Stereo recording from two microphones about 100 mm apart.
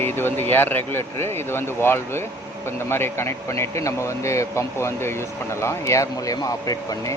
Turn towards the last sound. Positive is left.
turn(degrees=35)  # may be behind; listen again after turning